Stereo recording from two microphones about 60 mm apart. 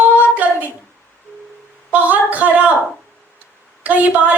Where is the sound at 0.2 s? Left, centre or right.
Right.